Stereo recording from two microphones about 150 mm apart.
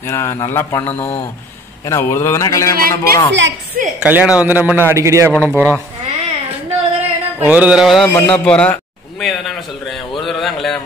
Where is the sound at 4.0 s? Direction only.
10° right (ahead or behind).